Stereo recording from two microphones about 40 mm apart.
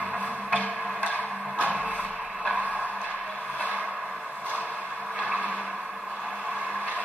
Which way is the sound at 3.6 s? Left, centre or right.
Right.